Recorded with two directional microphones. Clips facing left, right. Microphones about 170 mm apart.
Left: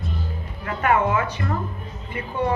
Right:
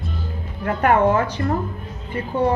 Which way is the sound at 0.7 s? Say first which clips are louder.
Right 4 dB; 40° right (ahead or behind).